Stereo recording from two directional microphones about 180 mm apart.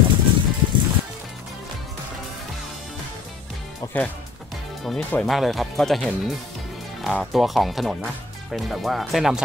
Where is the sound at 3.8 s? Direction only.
20° left (ahead or behind).